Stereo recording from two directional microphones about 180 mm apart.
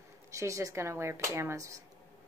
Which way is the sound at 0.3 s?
15° right (ahead or behind).